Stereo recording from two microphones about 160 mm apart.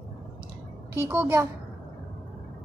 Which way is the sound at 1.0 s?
15° right (ahead or behind).